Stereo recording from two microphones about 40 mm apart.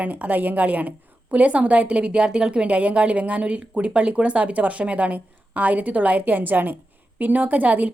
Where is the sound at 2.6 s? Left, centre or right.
Right.